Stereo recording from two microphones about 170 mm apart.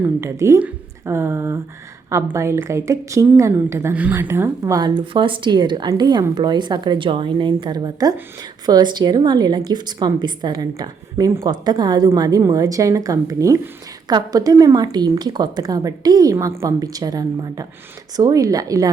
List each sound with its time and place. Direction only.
0.0 s a woman's voice: 15° right (ahead or behind)